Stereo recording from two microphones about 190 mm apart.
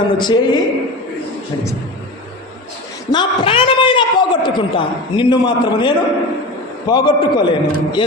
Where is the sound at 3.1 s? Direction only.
25° left (ahead or behind).